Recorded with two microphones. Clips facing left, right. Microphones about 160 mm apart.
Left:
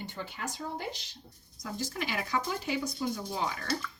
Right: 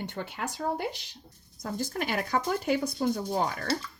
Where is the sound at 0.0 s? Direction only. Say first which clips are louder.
Right 4 dB; 65° right (ahead or behind).